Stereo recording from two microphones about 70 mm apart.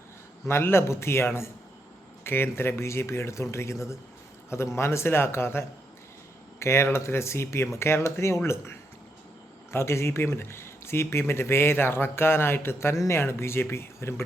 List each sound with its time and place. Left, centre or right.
0.4 s speech: left
9.7 s speech: left